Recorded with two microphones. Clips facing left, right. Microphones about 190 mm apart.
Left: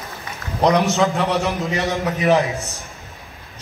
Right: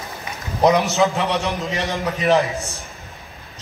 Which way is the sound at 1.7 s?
15° right (ahead or behind).